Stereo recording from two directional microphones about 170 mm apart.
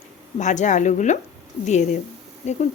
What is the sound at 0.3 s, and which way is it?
Speech, 45° left (ahead or behind).